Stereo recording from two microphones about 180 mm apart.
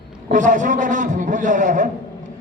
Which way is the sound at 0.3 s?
45° right (ahead or behind).